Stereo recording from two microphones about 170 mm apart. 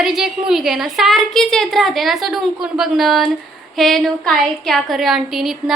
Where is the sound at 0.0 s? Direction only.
Centre (ahead or behind).